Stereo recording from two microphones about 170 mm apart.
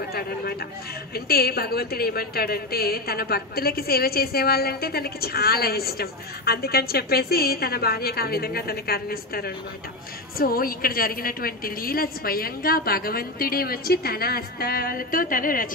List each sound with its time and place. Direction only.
0.1 s a woman's voice: 65° left (ahead or behind)